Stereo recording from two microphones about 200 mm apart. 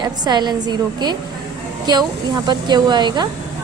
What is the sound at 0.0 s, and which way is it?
A woman's voice, 20° right (ahead or behind).